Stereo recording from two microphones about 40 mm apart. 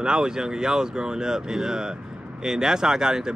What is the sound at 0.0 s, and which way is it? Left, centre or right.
Speech, centre.